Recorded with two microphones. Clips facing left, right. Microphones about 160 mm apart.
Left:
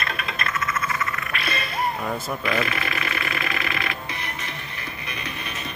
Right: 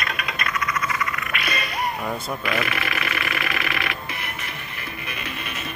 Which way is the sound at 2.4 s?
25° left (ahead or behind).